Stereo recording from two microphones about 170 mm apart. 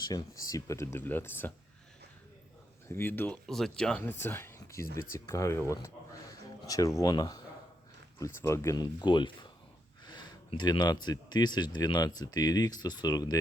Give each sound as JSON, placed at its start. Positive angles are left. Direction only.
{"t": 0.0, "sound": "speech", "side_deg": 20}
{"t": 2.9, "sound": "speech", "side_deg": 10}